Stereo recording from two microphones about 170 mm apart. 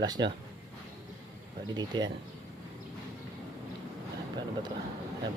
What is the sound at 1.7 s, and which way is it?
Speech, 25° right (ahead or behind).